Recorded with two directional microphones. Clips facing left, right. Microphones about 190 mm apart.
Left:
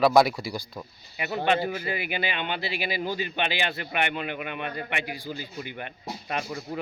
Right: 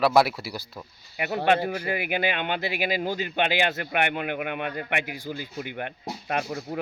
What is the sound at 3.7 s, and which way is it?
Speech, 55° right (ahead or behind).